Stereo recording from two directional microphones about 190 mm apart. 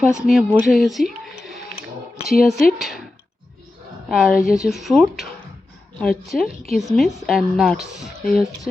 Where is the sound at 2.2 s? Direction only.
55° left (ahead or behind).